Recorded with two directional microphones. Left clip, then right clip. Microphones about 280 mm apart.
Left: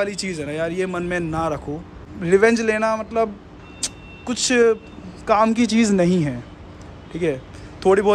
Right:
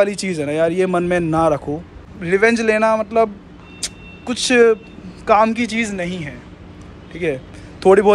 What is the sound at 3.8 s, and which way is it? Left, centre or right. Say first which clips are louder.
Vehicle: right 1 dB; centre.